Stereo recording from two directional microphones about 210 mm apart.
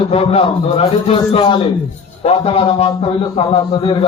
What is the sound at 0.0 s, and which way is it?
Speech, 25° left (ahead or behind).